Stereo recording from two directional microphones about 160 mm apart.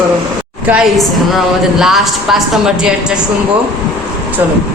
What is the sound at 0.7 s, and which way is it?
A woman's voice, centre (ahead or behind).